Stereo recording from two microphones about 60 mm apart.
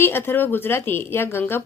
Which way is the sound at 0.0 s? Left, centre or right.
Left.